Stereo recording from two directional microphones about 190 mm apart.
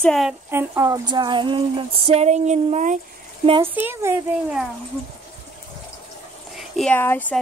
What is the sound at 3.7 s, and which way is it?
Speech, 10° right (ahead or behind).